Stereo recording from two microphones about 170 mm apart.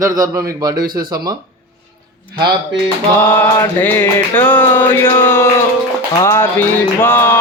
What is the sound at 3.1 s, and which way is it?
Music, 15° left (ahead or behind).